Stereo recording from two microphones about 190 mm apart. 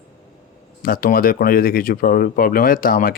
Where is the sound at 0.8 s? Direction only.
50° left (ahead or behind).